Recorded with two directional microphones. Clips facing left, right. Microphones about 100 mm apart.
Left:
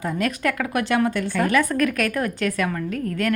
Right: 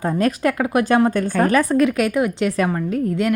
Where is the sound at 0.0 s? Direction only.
35° right (ahead or behind); by 2.5 s 20° right (ahead or behind).